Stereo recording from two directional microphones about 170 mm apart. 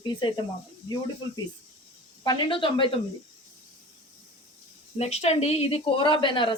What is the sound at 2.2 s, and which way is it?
Speech, 30° left (ahead or behind).